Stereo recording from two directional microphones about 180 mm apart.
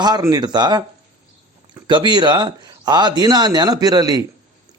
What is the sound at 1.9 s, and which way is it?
A man's voice, 25° right (ahead or behind).